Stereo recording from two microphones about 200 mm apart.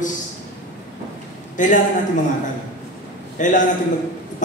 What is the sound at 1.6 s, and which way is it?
Speech, 40° left (ahead or behind).